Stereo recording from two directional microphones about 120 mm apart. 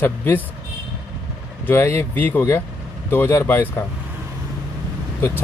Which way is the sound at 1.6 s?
15° left (ahead or behind).